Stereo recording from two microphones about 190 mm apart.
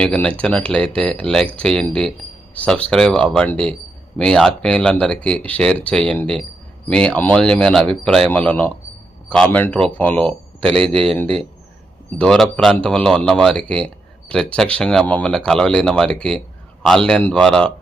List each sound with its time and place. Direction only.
0.0 s speech: 5° left (ahead or behind)
10.8 s speech: 25° right (ahead or behind)
12.1 s speech: 5° left (ahead or behind)